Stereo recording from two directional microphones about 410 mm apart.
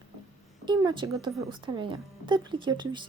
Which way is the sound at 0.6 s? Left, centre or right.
Centre.